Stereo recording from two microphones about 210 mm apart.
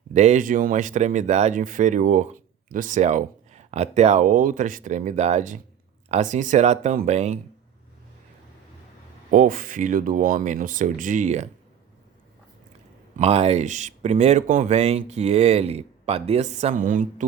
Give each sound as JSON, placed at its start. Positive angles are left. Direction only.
{"t": 0.1, "sound": "speech", "side_deg": -35}
{"t": 9.3, "sound": "speech", "side_deg": -40}
{"t": 13.1, "sound": "speech", "side_deg": -30}